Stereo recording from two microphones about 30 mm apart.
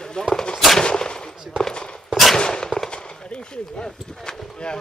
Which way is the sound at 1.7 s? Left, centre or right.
Left.